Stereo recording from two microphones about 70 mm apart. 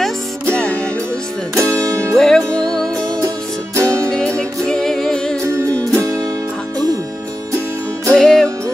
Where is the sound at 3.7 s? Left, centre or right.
Right.